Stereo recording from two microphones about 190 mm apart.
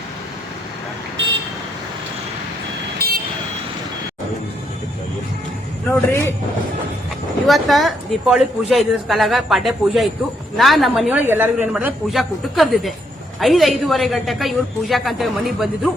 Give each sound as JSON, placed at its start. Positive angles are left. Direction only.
{"t": 3.0, "sound": "vehicle", "side_deg": -55}
{"t": 5.9, "sound": "a man's voice", "side_deg": 10}
{"t": 7.4, "sound": "a man's voice", "side_deg": 0}